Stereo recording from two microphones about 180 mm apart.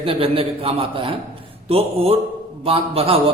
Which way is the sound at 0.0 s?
30° right (ahead or behind).